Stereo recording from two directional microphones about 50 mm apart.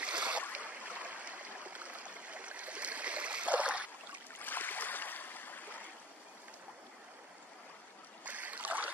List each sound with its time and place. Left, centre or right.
0.0 s boat: right
0.6 s stream: right
4.4 s stream: left
8.3 s boat: right